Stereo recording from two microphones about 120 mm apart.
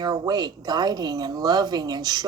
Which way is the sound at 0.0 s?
35° right (ahead or behind).